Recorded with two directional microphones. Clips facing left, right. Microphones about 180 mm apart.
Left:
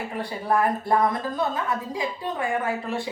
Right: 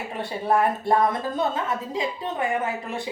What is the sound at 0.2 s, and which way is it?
Speech, 25° right (ahead or behind).